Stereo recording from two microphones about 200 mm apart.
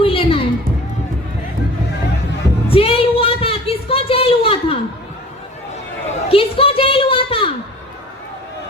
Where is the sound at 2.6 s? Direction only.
30° left (ahead or behind).